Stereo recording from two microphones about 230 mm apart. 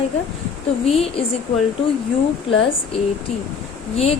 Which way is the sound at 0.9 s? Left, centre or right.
Left.